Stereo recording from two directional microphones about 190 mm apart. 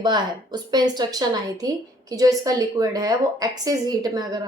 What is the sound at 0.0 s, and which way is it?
Speech, 20° right (ahead or behind).